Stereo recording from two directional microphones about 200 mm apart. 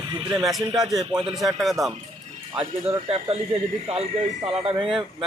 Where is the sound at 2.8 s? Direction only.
30° right (ahead or behind).